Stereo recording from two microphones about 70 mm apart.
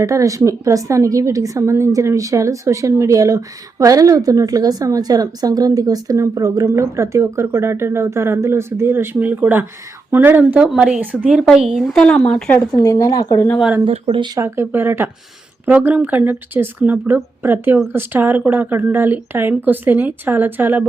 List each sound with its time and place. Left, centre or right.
0.0 s a woman's voice: right
10.6 s speech: centre
11.0 s speech: right
11.4 s speech: centre
11.9 s speech: centre
12.8 s speech: left
14.3 s speech: right